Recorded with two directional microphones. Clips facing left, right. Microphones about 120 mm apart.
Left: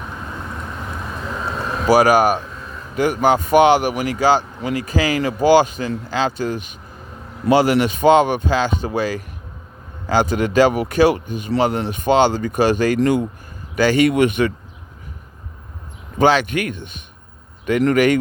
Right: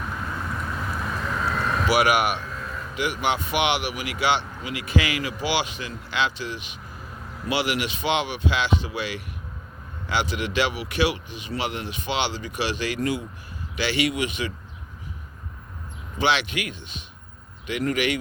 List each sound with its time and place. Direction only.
1.5 s vehicle: 25° left (ahead or behind)
1.9 s speech: 40° left (ahead or behind); by 14.5 s 55° left (ahead or behind)
16.1 s speech: 45° left (ahead or behind)
17.9 s speech: 50° left (ahead or behind)